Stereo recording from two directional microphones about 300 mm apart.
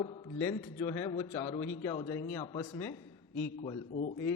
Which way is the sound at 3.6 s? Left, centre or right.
Left.